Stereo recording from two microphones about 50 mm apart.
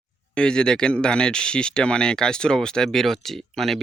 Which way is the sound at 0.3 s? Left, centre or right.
Centre.